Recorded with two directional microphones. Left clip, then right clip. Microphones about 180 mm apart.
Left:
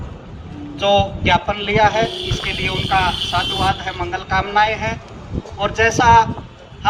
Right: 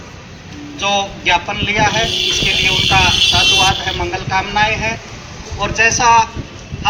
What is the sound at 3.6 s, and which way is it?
Speech, 15° left (ahead or behind).